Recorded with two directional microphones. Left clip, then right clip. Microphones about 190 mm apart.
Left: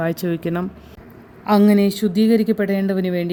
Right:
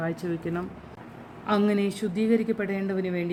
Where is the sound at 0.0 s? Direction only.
55° left (ahead or behind).